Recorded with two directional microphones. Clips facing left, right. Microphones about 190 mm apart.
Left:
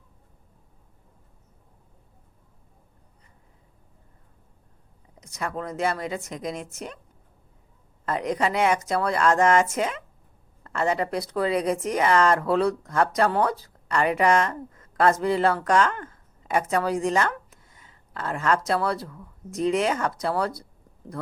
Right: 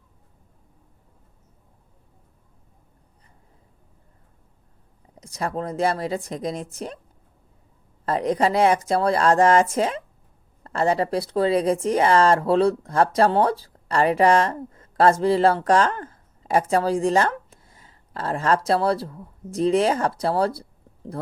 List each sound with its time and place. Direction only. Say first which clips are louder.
5.2 s speech: right 4 dB; 30° right (ahead or behind)
8.0 s speech: right 4 dB; 35° right (ahead or behind)